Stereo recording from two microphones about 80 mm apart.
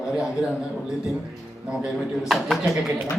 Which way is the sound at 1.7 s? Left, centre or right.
Centre.